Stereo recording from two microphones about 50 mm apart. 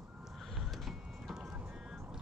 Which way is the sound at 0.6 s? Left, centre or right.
Centre.